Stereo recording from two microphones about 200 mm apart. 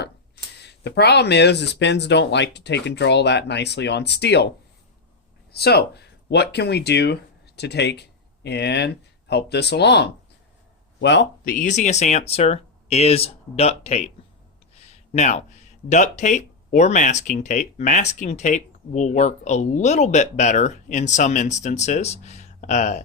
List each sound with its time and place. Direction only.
0.6 s speech: 55° left (ahead or behind)
5.5 s speech: 55° left (ahead or behind)
11.4 s speech: 40° left (ahead or behind)
14.8 s a sound: 35° left (ahead or behind)
15.9 s speech: 35° left (ahead or behind)